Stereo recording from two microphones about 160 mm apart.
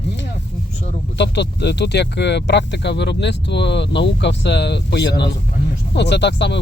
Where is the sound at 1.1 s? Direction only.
90° left.